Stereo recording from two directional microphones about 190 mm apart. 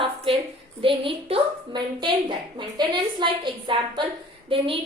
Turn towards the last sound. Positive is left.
turn(degrees=-30)  # may be behind; listen again after turning